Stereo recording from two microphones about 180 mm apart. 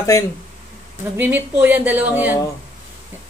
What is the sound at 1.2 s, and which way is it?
A woman's voice, 10° right (ahead or behind).